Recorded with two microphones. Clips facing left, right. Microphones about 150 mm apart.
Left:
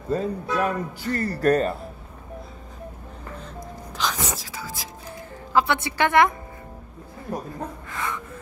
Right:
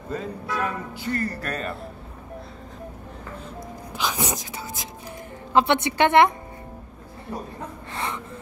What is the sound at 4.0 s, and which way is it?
A woman's voice, 10° right (ahead or behind).